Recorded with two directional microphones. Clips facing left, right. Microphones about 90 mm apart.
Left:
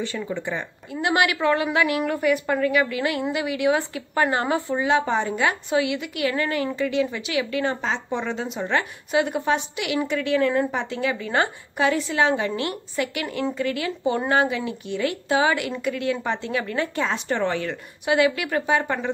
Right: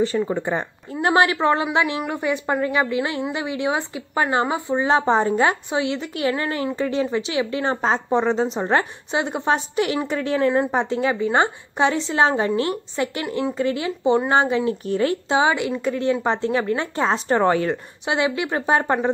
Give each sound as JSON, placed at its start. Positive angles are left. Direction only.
{"t": 0.0, "sound": "a woman's voice", "side_deg": -35}
{"t": 4.8, "sound": "a woman's voice", "side_deg": -35}
{"t": 15.2, "sound": "a woman's voice", "side_deg": -25}